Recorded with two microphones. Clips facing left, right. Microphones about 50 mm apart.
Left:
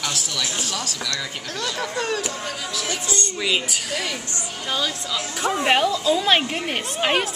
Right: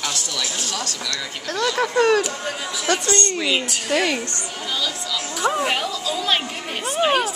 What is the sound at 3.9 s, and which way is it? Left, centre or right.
Speech, right.